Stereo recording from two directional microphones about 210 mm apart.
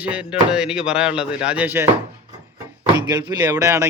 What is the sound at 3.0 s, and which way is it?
Speech, 20° right (ahead or behind).